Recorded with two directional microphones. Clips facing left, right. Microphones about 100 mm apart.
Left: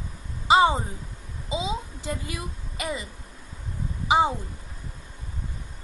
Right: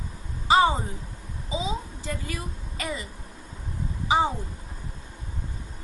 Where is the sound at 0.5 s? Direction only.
20° left (ahead or behind).